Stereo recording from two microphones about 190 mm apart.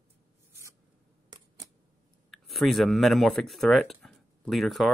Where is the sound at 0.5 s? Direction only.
15° right (ahead or behind).